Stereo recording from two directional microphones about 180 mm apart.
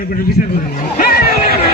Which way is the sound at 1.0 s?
60° left (ahead or behind).